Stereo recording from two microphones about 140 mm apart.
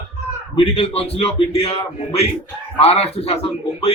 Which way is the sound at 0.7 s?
45° left (ahead or behind).